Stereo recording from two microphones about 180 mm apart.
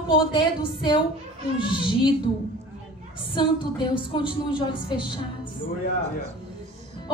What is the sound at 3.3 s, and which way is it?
A woman's voice, 25° left (ahead or behind).